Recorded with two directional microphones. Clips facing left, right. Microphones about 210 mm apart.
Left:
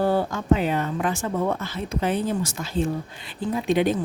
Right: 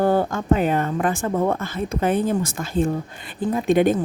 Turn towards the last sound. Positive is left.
turn(degrees=-50)  # may be behind; listen again after turning